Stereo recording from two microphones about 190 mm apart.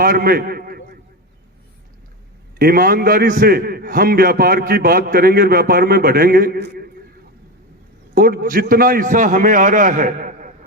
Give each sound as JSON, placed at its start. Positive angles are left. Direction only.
{"t": 0.0, "sound": "a man's voice", "side_deg": -50}
{"t": 2.6, "sound": "a man's voice", "side_deg": -50}
{"t": 8.1, "sound": "a man's voice", "side_deg": -50}